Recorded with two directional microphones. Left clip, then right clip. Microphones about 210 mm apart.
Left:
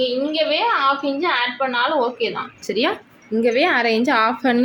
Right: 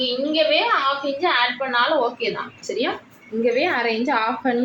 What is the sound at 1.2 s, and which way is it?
Speech, 45° left (ahead or behind).